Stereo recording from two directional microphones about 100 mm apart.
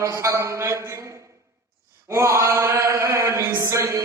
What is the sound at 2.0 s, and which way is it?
Mantra, 30° right (ahead or behind).